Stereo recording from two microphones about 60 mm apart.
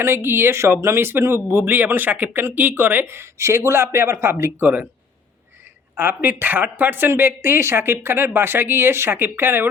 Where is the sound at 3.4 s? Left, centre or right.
Right.